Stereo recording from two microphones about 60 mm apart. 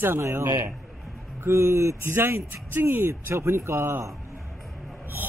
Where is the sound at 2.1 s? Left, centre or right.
Right.